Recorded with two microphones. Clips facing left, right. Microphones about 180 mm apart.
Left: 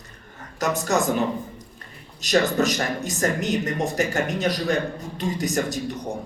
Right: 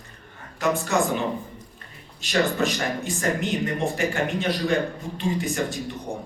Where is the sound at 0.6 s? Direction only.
40° left (ahead or behind).